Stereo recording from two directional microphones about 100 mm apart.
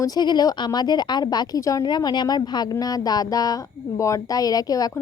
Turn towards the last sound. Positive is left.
turn(degrees=40)  # may be behind; listen again after turning